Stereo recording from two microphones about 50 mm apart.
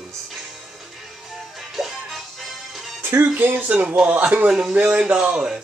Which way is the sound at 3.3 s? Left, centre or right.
Right.